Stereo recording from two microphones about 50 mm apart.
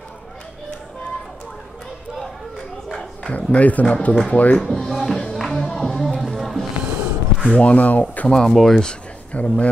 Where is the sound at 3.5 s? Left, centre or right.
Left.